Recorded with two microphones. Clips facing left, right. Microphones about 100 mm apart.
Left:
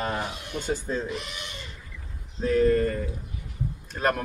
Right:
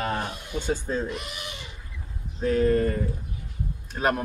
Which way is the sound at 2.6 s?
25° right (ahead or behind).